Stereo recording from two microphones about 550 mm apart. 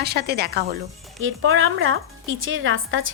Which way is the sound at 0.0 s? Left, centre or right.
Centre.